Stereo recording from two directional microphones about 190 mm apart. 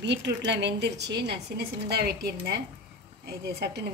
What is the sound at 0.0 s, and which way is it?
A woman's voice, 70° right (ahead or behind).